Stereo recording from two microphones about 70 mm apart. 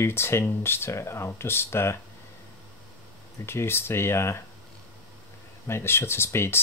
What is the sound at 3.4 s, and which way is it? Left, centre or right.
Speech, left.